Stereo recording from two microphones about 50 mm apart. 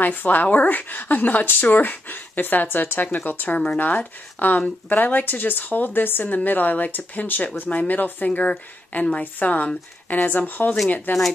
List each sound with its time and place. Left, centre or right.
0.0 s speech: left
3.5 s speech: left